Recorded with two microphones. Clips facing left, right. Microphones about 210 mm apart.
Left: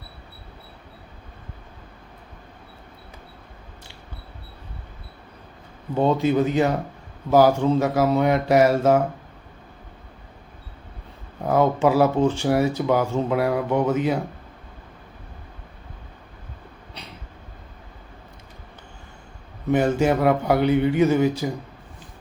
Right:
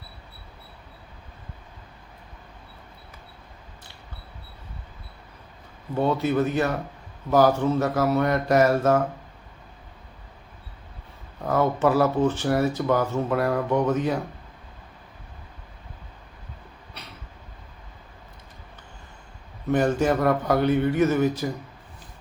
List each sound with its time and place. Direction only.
6.0 s speech: 15° left (ahead or behind)
11.4 s speech: 10° left (ahead or behind)
19.7 s speech: 10° left (ahead or behind)